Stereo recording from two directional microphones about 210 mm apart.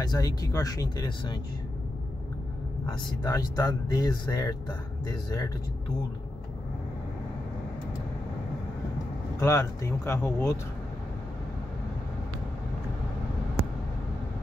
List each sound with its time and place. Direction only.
0.0 s speech: 20° left (ahead or behind)
2.9 s speech: 15° left (ahead or behind)
9.4 s speech: 15° left (ahead or behind)